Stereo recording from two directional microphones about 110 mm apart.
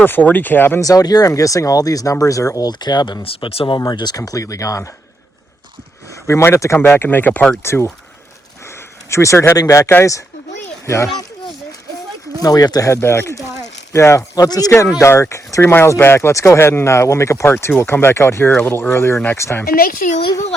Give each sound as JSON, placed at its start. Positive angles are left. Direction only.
{"t": 0.0, "sound": "speech", "side_deg": 15}
{"t": 0.8, "sound": "speech", "side_deg": 35}
{"t": 3.2, "sound": "speech", "side_deg": 60}
{"t": 3.8, "sound": "speech", "side_deg": 40}
{"t": 6.2, "sound": "a child's voice", "side_deg": 25}
{"t": 12.4, "sound": "speech", "side_deg": 35}
{"t": 14.9, "sound": "speech", "side_deg": 25}